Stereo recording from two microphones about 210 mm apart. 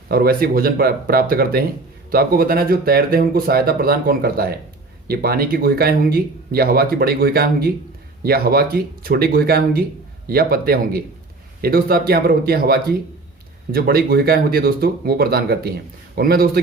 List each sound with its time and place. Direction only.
0.1 s speech: 45° right (ahead or behind)